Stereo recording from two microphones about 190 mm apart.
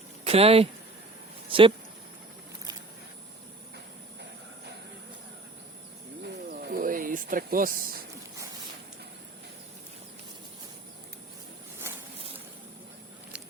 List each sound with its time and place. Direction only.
0.3 s speech: 30° right (ahead or behind)
6.2 s snake: 55° right (ahead or behind)
13.3 s a sound: 5° right (ahead or behind)